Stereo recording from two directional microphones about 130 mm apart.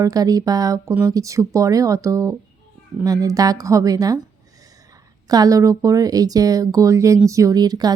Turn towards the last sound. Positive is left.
turn(degrees=-30)  # may be behind; listen again after turning